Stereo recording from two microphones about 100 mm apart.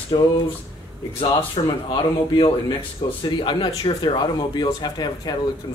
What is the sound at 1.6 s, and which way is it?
Speech, 70° left (ahead or behind).